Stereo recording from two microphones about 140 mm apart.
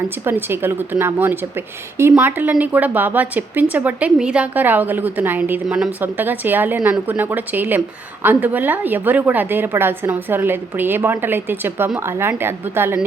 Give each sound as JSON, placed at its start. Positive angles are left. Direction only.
{"t": 0.3, "sound": "a woman's voice", "side_deg": -15}